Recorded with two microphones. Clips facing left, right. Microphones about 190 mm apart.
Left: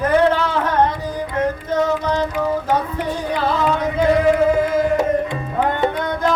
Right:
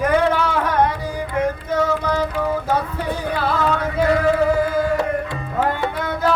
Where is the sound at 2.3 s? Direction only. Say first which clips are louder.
Left 1 dB; 15° left (ahead or behind).